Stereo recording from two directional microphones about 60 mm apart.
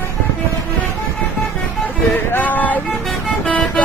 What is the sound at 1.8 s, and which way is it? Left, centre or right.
Vehicle, left.